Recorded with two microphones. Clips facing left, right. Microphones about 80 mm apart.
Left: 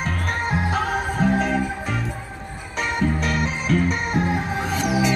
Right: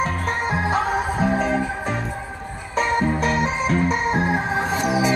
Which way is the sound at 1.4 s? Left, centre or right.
Right.